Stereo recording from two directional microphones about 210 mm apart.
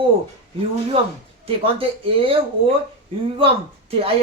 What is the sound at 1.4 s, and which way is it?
Speech, 25° right (ahead or behind).